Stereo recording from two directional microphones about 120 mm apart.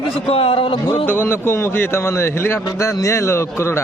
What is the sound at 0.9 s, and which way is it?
A man's voice, 15° left (ahead or behind).